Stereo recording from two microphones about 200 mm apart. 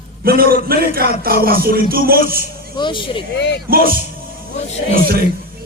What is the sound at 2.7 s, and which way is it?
Speech, 25° left (ahead or behind).